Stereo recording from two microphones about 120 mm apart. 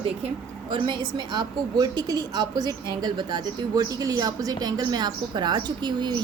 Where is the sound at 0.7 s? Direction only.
40° right (ahead or behind).